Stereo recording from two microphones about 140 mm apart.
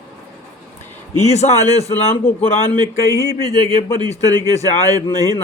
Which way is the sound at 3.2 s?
25° right (ahead or behind).